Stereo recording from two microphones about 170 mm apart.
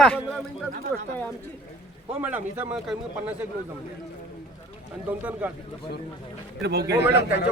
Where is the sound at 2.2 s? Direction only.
10° right (ahead or behind).